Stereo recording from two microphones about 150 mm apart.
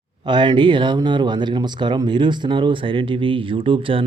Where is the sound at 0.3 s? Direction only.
30° right (ahead or behind).